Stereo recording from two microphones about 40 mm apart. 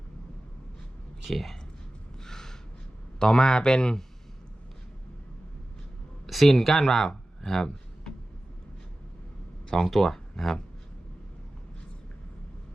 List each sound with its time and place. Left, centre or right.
1.2 s speech: centre
2.2 s a sound: centre
3.2 s speech: centre
6.2 s speech: centre
7.4 s a sound: centre
9.6 s speech: centre